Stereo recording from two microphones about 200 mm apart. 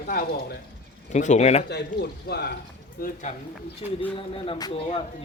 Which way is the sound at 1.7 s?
55° left (ahead or behind).